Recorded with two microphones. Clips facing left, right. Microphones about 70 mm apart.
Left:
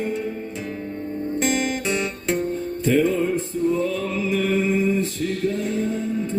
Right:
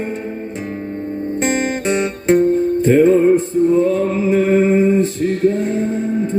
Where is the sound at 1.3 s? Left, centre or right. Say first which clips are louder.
Right 4 dB; right.